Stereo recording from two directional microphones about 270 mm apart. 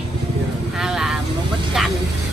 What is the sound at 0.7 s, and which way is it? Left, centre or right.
Speech, centre.